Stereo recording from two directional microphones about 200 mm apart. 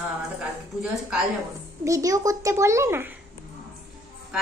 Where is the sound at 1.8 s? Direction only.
15° right (ahead or behind).